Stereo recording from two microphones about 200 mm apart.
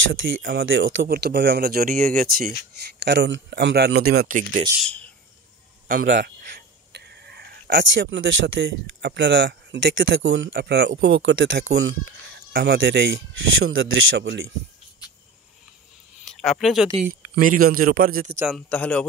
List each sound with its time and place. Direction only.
0.1 s speech: 75° right (ahead or behind)
0.4 s speech: 50° right (ahead or behind)
0.7 s speech: 75° right (ahead or behind)
1.1 s speech: 50° right (ahead or behind)
3.0 s a man's voice: 60° right (ahead or behind); by 4.6 s 40° right (ahead or behind)
4.8 s speech: 5° left (ahead or behind)
6.0 s speech: 60° right (ahead or behind); by 11.9 s 75° right (ahead or behind)
12.5 s a man's voice: 55° right (ahead or behind)
13.6 s speech: 85° right; by 14.5 s 60° right (ahead or behind)
16.3 s speech: centre (ahead or behind)
17.4 s speech: 45° right (ahead or behind)
18.5 s a man's voice: 5° left (ahead or behind)